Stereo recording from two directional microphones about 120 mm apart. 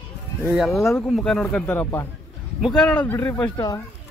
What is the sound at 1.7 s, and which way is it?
Speech, 15° left (ahead or behind).